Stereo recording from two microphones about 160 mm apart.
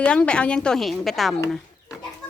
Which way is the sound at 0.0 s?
5° left (ahead or behind).